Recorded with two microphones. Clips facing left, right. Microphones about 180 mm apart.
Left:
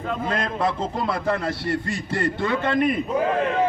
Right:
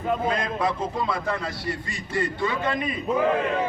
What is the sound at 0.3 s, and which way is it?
A man's voice, 60° left (ahead or behind).